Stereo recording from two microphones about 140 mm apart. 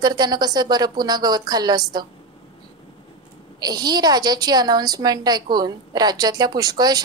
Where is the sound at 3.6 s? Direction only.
30° right (ahead or behind).